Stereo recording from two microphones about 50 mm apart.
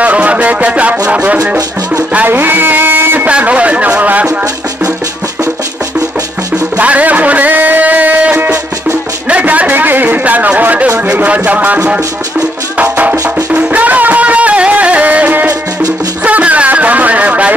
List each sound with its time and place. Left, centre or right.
0.0 s music: right
2.2 s speech: right
3.3 s speech: right
6.5 s music: right
9.3 s a sound: right
11.1 s speech: right
12.8 s music: right
16.3 s a sound: right